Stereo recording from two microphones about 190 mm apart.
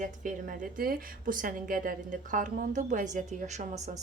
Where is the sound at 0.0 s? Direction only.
45° right (ahead or behind).